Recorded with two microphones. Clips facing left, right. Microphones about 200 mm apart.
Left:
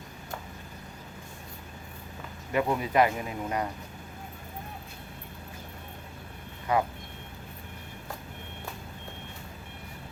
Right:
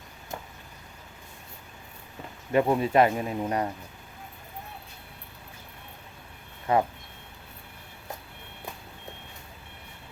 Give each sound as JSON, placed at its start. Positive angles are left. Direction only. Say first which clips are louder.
{"t": 2.5, "sound": "speech", "louder": "right 5 dB", "side_deg": -30}
{"t": 6.7, "sound": "speech", "louder": "right 3 dB", "side_deg": -25}